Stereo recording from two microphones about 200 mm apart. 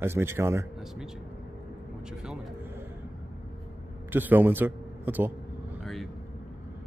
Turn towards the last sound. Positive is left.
turn(degrees=0)  # may be behind; listen again after turning